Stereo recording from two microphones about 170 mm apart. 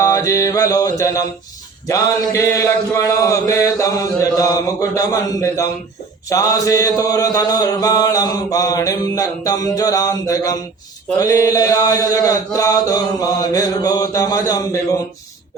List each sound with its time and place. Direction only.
0.0 s mantra: 20° left (ahead or behind)